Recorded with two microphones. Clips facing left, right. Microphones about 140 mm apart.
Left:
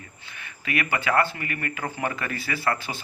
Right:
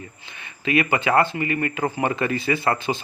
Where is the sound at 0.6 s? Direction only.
20° right (ahead or behind).